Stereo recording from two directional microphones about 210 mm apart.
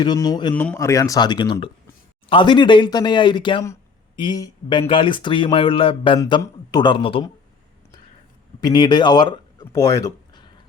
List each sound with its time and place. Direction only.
0.0 s speech: 20° left (ahead or behind)
0.5 s speech: 10° left (ahead or behind)
8.6 s speech: 20° left (ahead or behind)